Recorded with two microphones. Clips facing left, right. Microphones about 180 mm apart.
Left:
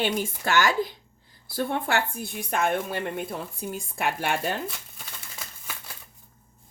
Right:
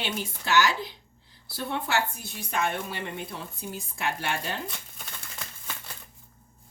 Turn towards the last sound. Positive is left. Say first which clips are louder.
# even
turn(degrees=5)  # may be behind; listen again after turning